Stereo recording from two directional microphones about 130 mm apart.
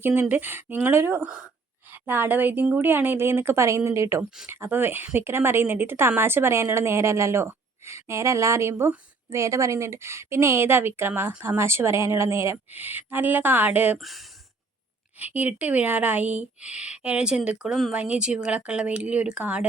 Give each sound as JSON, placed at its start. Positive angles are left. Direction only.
{"t": 0.0, "sound": "a woman's voice", "side_deg": -15}
{"t": 14.0, "sound": "speech", "side_deg": 0}
{"t": 15.2, "sound": "a woman's voice", "side_deg": -10}